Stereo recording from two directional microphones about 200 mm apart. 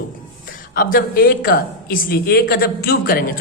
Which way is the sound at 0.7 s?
45° left (ahead or behind).